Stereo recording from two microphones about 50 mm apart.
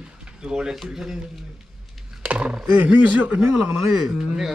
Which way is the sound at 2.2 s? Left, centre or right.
Right.